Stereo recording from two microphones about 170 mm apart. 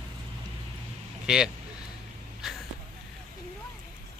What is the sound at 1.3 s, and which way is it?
Speech, 5° right (ahead or behind).